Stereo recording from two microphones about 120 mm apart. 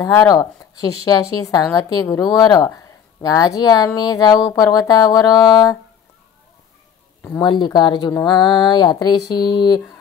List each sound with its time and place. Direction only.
0.0 s a woman's voice: 30° left (ahead or behind)
7.4 s a woman's voice: 40° left (ahead or behind)